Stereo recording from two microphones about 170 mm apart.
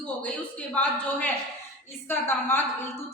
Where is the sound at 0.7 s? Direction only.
10° left (ahead or behind).